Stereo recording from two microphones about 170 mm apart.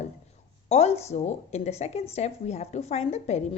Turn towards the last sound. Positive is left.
turn(degrees=40)  # may be behind; listen again after turning